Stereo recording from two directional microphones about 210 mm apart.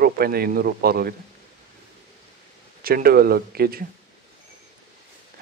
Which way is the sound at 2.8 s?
45° right (ahead or behind).